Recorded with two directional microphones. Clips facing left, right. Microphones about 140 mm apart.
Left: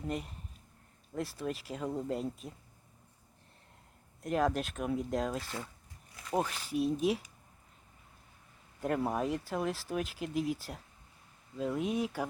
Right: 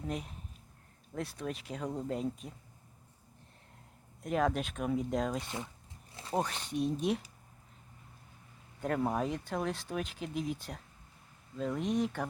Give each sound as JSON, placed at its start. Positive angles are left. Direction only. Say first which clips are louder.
{"t": 0.0, "sound": "speech", "louder": "left 1 dB", "side_deg": 0}
{"t": 4.2, "sound": "speech", "louder": "even", "side_deg": 0}
{"t": 6.1, "sound": "zipper", "louder": "right 2 dB", "side_deg": -30}
{"t": 6.3, "sound": "speech", "louder": "left 1 dB", "side_deg": 5}
{"t": 8.8, "sound": "speech", "louder": "even", "side_deg": 0}